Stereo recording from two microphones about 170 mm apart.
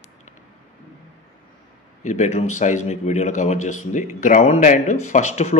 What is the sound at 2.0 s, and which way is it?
A man's voice, 45° left (ahead or behind).